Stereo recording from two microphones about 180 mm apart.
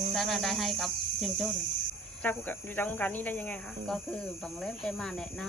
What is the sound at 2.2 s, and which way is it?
Cricket, 10° left (ahead or behind).